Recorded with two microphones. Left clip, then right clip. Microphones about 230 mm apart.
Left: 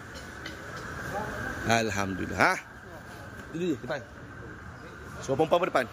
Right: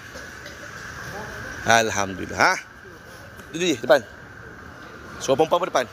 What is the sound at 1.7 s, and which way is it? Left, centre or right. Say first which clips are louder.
Speech: right 9 dB; centre.